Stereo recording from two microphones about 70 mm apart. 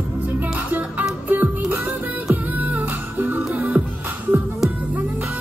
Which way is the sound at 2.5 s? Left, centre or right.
Right.